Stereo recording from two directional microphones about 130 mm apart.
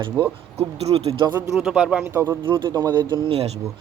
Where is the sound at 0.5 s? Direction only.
50° right (ahead or behind).